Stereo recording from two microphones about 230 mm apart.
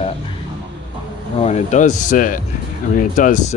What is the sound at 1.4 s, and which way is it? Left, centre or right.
Speech, left.